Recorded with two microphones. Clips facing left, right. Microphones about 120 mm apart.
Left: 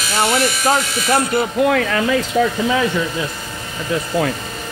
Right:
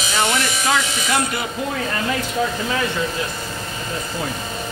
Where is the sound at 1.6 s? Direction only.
65° left (ahead or behind).